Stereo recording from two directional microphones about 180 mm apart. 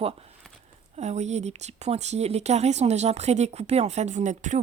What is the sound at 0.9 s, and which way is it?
Speech, 40° right (ahead or behind).